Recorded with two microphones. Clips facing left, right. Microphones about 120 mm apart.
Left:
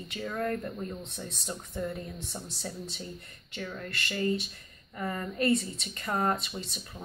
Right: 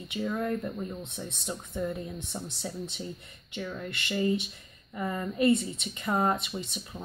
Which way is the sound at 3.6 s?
10° right (ahead or behind).